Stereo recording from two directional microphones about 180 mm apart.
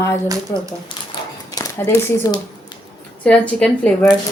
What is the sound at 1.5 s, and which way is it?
Speech, 20° left (ahead or behind).